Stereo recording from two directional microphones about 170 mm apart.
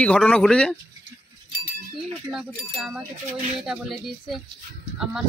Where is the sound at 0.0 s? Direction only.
5° left (ahead or behind).